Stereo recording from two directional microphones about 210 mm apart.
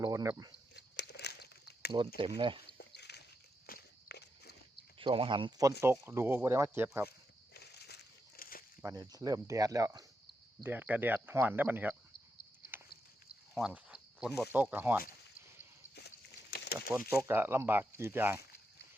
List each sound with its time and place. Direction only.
0.0 s speech: 15° right (ahead or behind)
0.7 s crumpling: 55° left (ahead or behind)
2.2 s speech: 25° right (ahead or behind)
2.7 s a sound: 50° left (ahead or behind)
3.7 s walk: 50° left (ahead or behind)
4.9 s speech: 25° right (ahead or behind)
7.5 s a sound: 50° left (ahead or behind)
8.8 s speech: 15° right (ahead or behind)
13.5 s speech: 5° right (ahead or behind)
16.0 s a sound: 50° left (ahead or behind)
17.2 s speech: 10° right (ahead or behind)